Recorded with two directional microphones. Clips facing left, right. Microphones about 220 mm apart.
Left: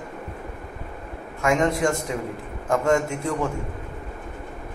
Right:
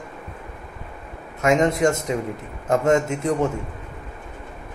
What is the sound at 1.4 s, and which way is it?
A man's voice, 20° right (ahead or behind).